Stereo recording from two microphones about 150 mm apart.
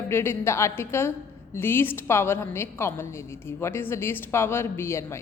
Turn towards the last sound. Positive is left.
turn(degrees=20)  # may be behind; listen again after turning